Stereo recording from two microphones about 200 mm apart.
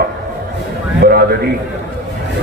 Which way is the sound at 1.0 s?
50° right (ahead or behind).